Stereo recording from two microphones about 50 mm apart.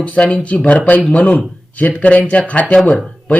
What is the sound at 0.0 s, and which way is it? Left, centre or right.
Speech, left.